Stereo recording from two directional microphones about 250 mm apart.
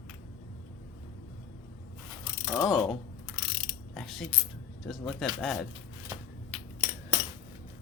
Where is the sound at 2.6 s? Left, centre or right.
Centre.